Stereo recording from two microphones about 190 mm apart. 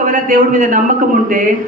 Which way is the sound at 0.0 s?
45° right (ahead or behind).